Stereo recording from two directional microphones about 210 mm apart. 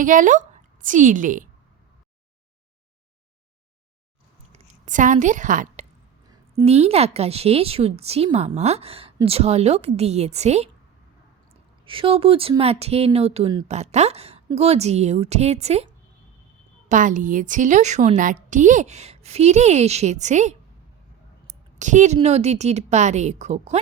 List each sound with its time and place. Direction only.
0.0 s a woman's voice: 40° right (ahead or behind)
4.5 s a woman's voice: 35° right (ahead or behind)
11.9 s a woman's voice: 25° right (ahead or behind)
16.9 s a woman's voice: 40° right (ahead or behind)